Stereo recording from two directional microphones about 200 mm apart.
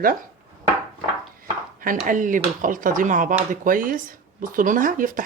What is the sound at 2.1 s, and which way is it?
Speech, 40° right (ahead or behind).